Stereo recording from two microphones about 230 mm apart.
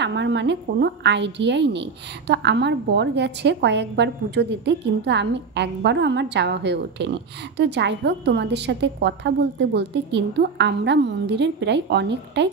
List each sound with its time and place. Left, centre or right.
0.0 s a woman's voice: right